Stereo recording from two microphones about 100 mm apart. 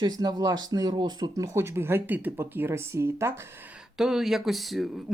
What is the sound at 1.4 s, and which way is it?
Speech, 30° right (ahead or behind).